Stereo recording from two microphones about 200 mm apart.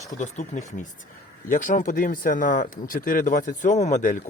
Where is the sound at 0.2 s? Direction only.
40° left (ahead or behind).